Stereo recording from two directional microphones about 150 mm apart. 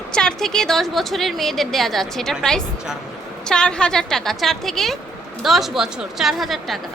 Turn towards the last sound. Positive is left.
turn(degrees=0)  # may be behind; listen again after turning